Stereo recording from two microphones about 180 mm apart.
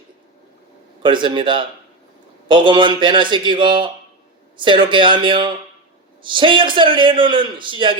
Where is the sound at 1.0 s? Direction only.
25° right (ahead or behind).